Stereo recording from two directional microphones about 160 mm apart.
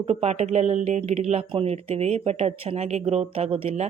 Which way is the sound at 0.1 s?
40° right (ahead or behind).